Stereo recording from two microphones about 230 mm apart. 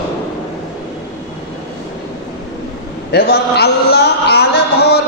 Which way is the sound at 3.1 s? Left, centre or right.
Left.